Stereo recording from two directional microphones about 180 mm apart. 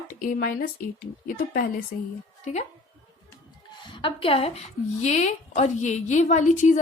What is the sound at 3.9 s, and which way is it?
A woman's voice, 30° left (ahead or behind).